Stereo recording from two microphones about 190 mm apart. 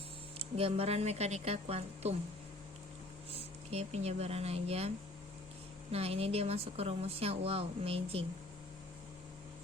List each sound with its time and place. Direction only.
0.3 s a woman's voice: 30° right (ahead or behind)
3.3 s speech: 35° right (ahead or behind)
5.9 s a woman's voice: 30° right (ahead or behind)